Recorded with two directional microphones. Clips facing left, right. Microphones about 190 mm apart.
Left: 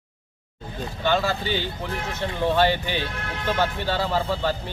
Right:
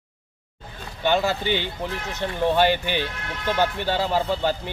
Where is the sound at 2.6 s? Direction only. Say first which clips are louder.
Even; 15° right (ahead or behind).